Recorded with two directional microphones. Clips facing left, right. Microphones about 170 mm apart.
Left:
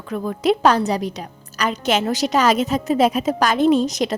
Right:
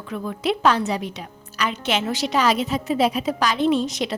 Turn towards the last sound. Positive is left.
turn(degrees=40)  # may be behind; listen again after turning